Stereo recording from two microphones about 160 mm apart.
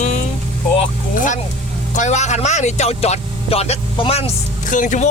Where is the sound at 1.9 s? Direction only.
50° left (ahead or behind).